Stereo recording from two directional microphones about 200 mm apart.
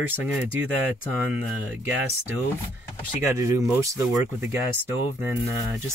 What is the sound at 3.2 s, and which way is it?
Speech, 15° right (ahead or behind).